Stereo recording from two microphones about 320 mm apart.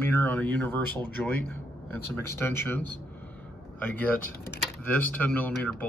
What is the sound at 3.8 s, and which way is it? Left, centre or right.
A man's voice, centre.